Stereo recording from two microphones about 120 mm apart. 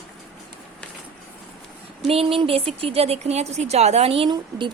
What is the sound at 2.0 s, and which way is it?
Speech, 50° right (ahead or behind).